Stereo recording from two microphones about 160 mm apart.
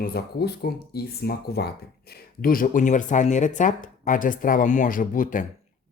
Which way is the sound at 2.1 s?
65° left (ahead or behind).